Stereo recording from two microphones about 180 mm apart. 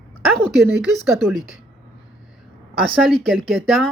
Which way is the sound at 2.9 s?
5° right (ahead or behind).